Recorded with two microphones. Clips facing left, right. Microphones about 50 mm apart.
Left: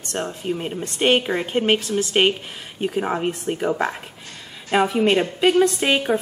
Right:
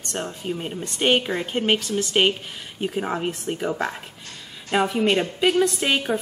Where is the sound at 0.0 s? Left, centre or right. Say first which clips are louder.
Left 3 dB; centre.